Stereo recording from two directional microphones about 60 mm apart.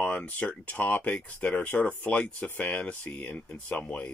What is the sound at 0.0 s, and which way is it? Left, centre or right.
Speech, left.